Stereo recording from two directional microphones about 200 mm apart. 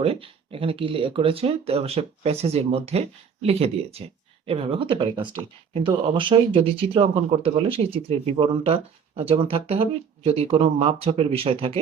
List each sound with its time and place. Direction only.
0.0 s speech: 30° right (ahead or behind)